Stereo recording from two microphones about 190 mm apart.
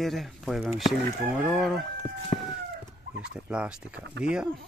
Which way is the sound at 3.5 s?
5° right (ahead or behind).